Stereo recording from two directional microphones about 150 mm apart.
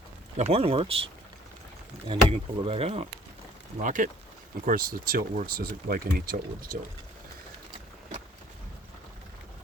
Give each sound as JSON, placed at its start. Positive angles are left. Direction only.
{"t": 0.3, "sound": "speech", "side_deg": -45}
{"t": 3.8, "sound": "speech", "side_deg": -60}
{"t": 4.6, "sound": "speech", "side_deg": -75}